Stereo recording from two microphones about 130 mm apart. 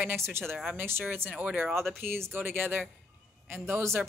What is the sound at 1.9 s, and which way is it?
Speech, 20° right (ahead or behind).